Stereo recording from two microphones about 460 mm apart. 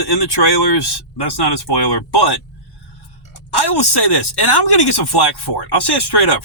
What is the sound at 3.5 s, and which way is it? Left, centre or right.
Speech, left.